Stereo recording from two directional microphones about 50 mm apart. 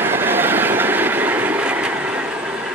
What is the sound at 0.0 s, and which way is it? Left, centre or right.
Train, right.